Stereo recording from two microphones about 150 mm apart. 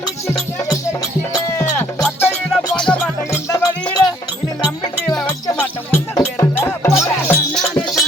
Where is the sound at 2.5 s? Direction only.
5° left (ahead or behind).